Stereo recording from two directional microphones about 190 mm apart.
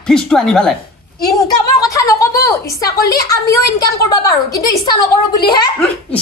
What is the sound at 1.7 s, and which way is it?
A woman's voice, 15° left (ahead or behind).